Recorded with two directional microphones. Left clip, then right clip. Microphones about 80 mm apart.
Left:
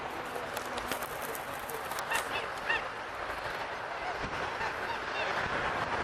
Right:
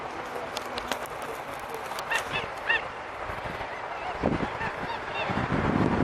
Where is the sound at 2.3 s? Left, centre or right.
Centre.